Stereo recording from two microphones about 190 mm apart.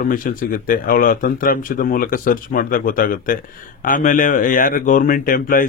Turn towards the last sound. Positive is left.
turn(degrees=45)  # may be behind; listen again after turning